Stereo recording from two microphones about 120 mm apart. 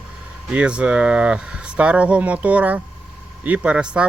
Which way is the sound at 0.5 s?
10° right (ahead or behind).